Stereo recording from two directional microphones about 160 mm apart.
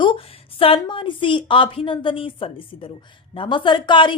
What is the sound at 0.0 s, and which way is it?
A woman's voice, 35° left (ahead or behind).